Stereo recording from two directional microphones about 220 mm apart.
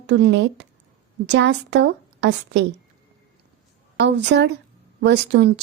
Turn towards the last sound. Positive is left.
turn(degrees=-50)  # may be behind; listen again after turning